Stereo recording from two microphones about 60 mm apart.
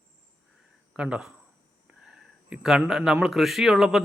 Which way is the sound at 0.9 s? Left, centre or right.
Centre.